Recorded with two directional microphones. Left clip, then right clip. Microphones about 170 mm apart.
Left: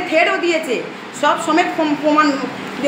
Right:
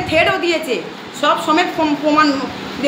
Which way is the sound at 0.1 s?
Centre (ahead or behind).